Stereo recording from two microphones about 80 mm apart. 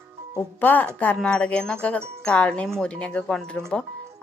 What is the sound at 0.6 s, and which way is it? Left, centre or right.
Speech, left.